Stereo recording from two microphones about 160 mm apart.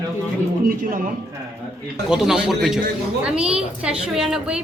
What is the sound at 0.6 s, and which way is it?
Speech, 55° right (ahead or behind).